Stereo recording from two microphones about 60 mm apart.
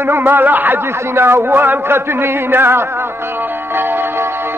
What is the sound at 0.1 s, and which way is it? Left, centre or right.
A man's voice, right.